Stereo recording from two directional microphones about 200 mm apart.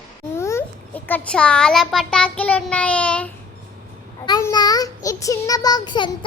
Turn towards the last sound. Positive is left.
turn(degrees=20)  # may be behind; listen again after turning